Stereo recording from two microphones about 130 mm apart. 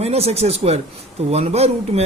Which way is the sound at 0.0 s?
50° right (ahead or behind).